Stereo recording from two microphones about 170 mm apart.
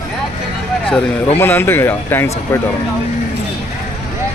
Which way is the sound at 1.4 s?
15° left (ahead or behind).